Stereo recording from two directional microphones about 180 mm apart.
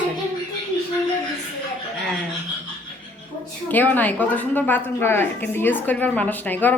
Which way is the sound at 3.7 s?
10° left (ahead or behind).